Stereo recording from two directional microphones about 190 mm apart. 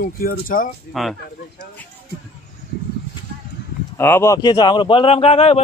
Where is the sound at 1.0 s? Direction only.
Centre (ahead or behind).